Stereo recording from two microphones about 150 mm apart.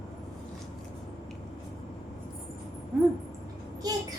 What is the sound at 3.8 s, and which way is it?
Child singing, 25° right (ahead or behind).